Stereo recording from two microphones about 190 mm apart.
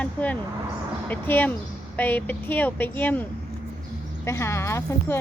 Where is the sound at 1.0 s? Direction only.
10° left (ahead or behind).